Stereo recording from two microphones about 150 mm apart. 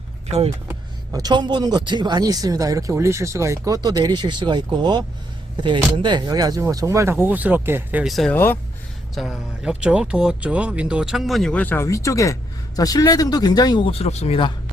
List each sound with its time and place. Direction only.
0.3 s speech: 45° right (ahead or behind)
0.7 s speech: 25° right (ahead or behind)
8.0 s speech: centre (ahead or behind); by 13.8 s 25° left (ahead or behind)
13.9 s speech: 45° left (ahead or behind)